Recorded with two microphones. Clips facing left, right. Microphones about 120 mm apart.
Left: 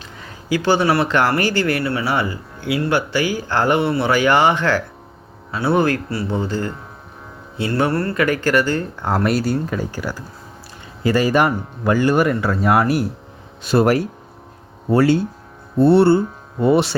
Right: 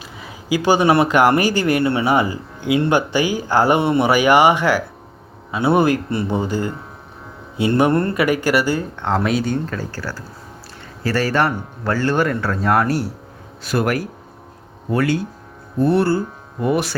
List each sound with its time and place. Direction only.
0.2 s speech: 10° right (ahead or behind)
9.0 s a man's voice: 5° left (ahead or behind)
13.6 s speech: 25° left (ahead or behind)